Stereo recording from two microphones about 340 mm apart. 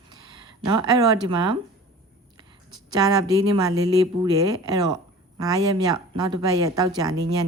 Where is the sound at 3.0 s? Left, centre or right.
Centre.